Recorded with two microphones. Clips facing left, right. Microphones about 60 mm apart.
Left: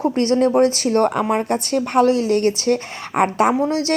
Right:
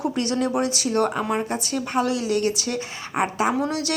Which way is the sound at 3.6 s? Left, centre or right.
Left.